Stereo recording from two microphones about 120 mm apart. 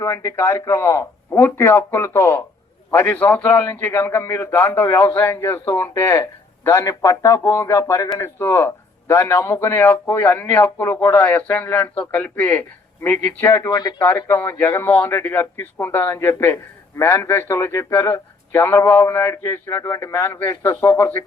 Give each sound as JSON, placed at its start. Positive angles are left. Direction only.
{"t": 0.0, "sound": "speech", "side_deg": 25}
{"t": 13.7, "sound": "speech", "side_deg": 30}
{"t": 14.0, "sound": "speech", "side_deg": 20}